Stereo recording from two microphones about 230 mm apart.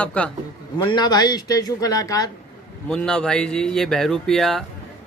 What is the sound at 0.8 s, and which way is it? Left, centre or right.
A man's voice, centre.